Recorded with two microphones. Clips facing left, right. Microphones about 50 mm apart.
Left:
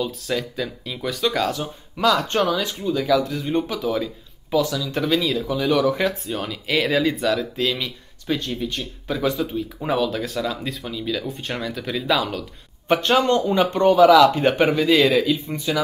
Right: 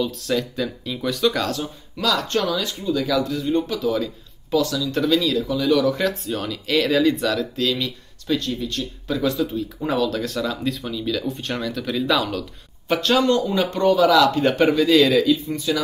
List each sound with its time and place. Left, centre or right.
0.0 s speech: centre
1.6 s speech: left
5.9 s speech: centre
7.7 s speech: centre
12.8 s speech: left
15.0 s speech: centre
15.2 s speech: left